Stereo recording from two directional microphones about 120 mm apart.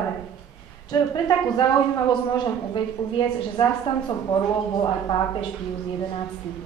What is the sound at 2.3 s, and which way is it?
Speech, 40° left (ahead or behind).